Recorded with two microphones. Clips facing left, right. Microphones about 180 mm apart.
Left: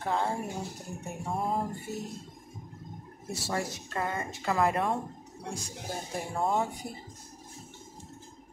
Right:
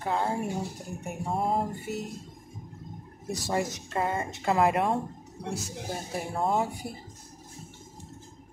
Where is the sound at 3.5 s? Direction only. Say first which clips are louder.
Right 4 dB; 20° right (ahead or behind).